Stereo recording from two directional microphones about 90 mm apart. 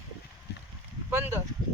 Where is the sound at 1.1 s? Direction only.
30° right (ahead or behind).